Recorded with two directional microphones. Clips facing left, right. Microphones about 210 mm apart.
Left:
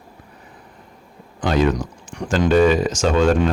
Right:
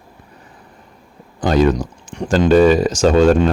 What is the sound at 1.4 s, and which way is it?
Speech, 40° right (ahead or behind).